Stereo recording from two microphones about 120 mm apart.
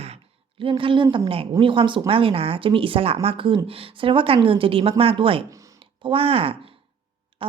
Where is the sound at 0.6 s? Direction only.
45° right (ahead or behind).